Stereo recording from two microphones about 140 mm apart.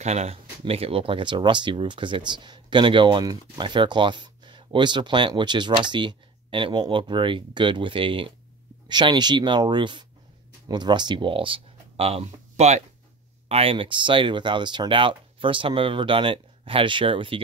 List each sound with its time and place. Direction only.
0.0 s speech: 50° right (ahead or behind)